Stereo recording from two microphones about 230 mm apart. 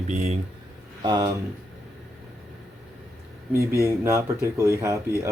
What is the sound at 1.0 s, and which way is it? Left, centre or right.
Speech, centre.